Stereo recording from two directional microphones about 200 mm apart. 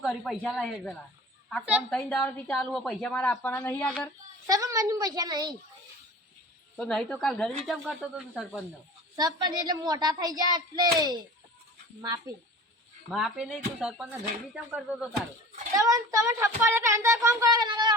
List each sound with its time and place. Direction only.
0.0 s a woman's voice: centre (ahead or behind)
4.4 s speech: 15° right (ahead or behind)
6.7 s speech: 5° left (ahead or behind)
9.1 s a woman's voice: 20° right (ahead or behind)
13.1 s speech: centre (ahead or behind)
15.7 s speech: 15° right (ahead or behind)